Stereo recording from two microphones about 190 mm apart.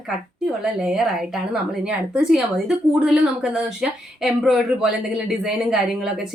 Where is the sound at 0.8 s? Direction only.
Centre (ahead or behind).